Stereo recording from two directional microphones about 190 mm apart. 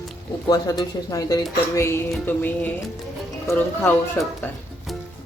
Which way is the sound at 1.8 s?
15° left (ahead or behind).